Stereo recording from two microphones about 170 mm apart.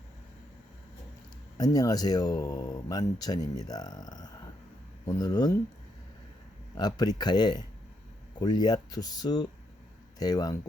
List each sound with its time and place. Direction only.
1.5 s speech: 20° left (ahead or behind)
6.7 s speech: 25° left (ahead or behind)